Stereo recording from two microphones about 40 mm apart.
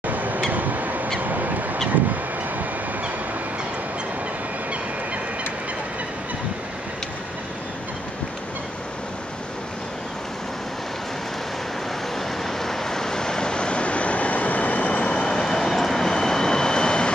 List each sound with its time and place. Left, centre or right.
0.0 s a sound: right
1.2 s crow: right
12.2 s vehicle: centre; by 15.2 s left
15.2 s vehicle: centre